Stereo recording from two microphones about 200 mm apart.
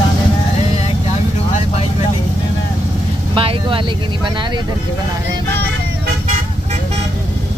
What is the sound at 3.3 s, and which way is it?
Speech, 25° right (ahead or behind).